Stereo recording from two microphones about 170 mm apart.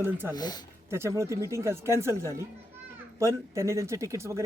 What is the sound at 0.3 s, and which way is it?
Speech, 25° left (ahead or behind).